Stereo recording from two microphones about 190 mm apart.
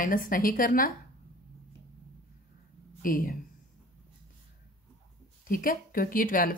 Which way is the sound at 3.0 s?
50° left (ahead or behind).